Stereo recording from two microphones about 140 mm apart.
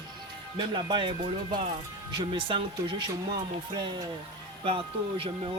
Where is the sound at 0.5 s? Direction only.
35° right (ahead or behind).